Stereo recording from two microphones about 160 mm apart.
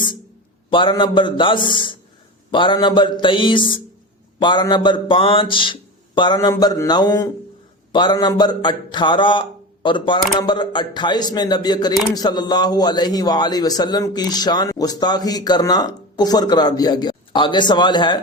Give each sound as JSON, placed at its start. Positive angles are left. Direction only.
{"t": 0.7, "sound": "a man's voice", "side_deg": 30}